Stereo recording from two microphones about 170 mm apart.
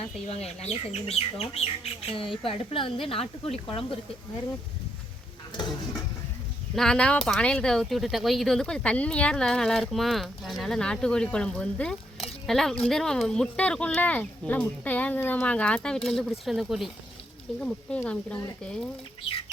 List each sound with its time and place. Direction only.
0.0 s speech: 35° left (ahead or behind)
5.5 s stir: 25° left (ahead or behind)
6.7 s speech: 5° left (ahead or behind)